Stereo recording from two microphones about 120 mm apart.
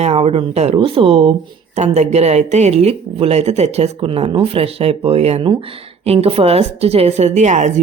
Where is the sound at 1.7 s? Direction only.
70° right (ahead or behind).